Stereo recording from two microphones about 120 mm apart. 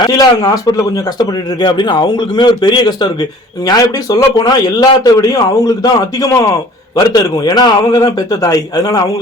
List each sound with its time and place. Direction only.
0.0 s a man's voice: 30° left (ahead or behind)